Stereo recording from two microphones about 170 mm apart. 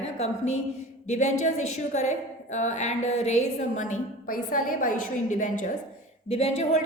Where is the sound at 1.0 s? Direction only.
45° left (ahead or behind).